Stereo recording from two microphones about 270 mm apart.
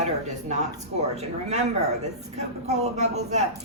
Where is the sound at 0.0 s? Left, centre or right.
Right.